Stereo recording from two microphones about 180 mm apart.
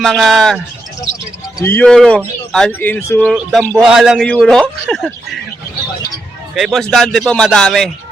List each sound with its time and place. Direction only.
0.0 s speech: centre (ahead or behind)
1.5 s speech: 10° left (ahead or behind)
3.3 s speech: 5° right (ahead or behind)
6.5 s speech: centre (ahead or behind)